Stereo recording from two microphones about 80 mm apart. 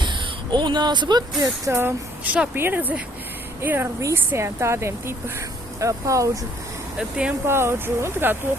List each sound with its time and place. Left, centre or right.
0.0 s a sound: right
1.4 s speech: right
2.2 s speech: centre; by 6.4 s right
7.4 s speech: right